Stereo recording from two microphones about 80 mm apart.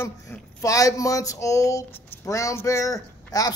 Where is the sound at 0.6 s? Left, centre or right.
Left.